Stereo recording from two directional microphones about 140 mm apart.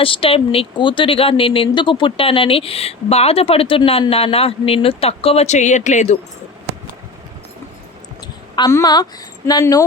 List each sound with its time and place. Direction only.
0.0 s speech: 40° left (ahead or behind); by 6.1 s 60° left (ahead or behind)
8.5 s a woman's voice: 25° left (ahead or behind)